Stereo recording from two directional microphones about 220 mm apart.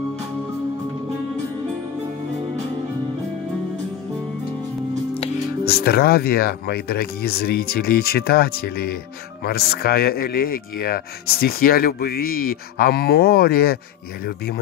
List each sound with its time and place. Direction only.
5.7 s speech: 45° left (ahead or behind)